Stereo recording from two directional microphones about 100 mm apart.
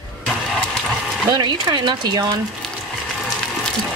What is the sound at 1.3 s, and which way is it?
Speech, 50° right (ahead or behind).